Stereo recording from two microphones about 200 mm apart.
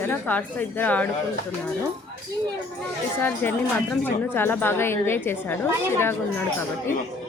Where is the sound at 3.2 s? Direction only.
10° left (ahead or behind).